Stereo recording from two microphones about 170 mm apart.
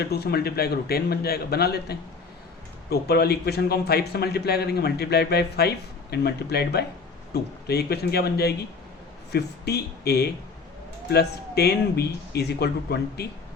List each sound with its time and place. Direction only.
0.0 s a man's voice: 65° left (ahead or behind)